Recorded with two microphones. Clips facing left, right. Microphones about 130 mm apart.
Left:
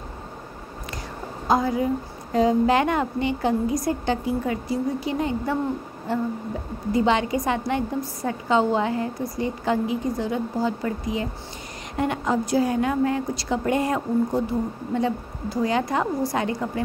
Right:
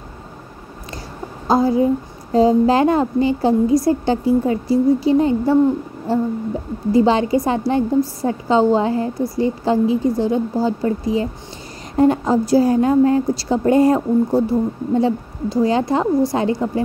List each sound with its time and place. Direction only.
1.5 s a woman's voice: 30° right (ahead or behind)